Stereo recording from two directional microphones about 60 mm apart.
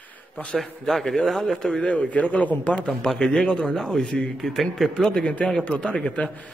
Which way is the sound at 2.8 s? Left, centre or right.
Centre.